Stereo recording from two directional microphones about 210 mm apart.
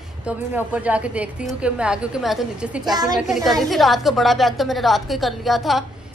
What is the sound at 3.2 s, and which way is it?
A woman's voice, centre (ahead or behind).